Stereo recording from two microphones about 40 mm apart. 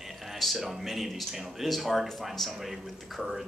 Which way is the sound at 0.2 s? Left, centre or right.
Centre.